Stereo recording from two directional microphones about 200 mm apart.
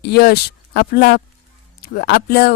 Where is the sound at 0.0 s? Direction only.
50° left (ahead or behind).